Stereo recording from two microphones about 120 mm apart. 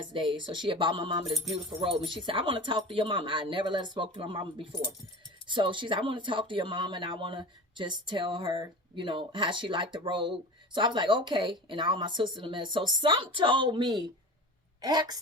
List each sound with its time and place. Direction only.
0.1 s speech: 45° right (ahead or behind)